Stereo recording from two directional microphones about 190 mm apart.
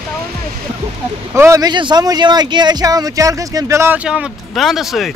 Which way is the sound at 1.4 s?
15° right (ahead or behind).